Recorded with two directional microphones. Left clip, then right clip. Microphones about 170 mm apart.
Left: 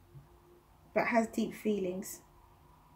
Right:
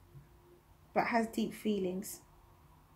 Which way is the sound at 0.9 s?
25° right (ahead or behind).